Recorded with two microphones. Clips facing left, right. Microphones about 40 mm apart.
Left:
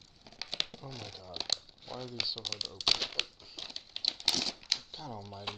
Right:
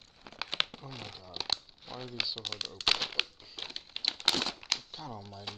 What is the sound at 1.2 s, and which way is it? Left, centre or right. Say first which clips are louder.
Crumpling: right 1 dB; centre.